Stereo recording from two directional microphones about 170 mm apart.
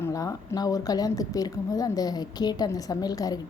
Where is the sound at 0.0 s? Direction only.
20° left (ahead or behind).